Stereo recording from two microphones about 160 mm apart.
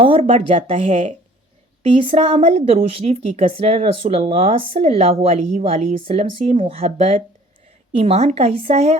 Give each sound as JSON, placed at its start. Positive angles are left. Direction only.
{"t": 0.0, "sound": "a woman's voice", "side_deg": -35}